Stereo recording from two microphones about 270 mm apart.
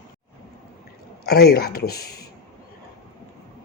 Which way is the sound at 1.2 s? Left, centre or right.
Left.